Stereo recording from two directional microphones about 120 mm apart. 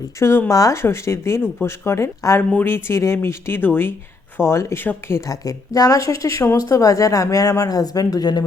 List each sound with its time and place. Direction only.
0.2 s a woman's voice: 20° left (ahead or behind)